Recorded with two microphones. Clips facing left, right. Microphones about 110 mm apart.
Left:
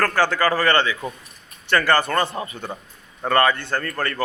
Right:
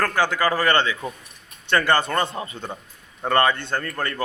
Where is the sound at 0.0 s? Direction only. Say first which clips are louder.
Left 2 dB; 15° right (ahead or behind).